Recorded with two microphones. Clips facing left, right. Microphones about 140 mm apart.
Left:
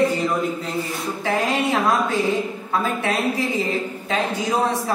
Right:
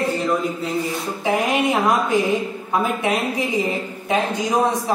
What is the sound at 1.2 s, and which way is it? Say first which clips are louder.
A woman's voice: right 2 dB; 15° right (ahead or behind).